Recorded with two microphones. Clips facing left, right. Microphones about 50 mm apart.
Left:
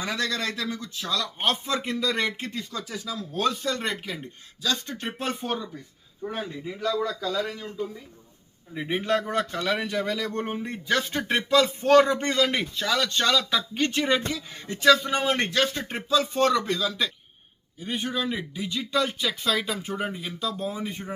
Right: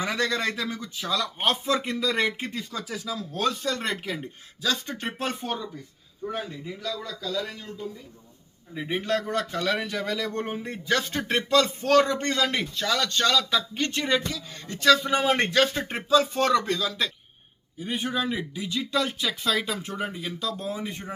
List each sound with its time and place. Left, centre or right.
0.0 s a man's voice: centre
7.1 s a man's voice: left
7.4 s a man's voice: centre
8.7 s a man's voice: centre
14.3 s speech: left
14.8 s a man's voice: centre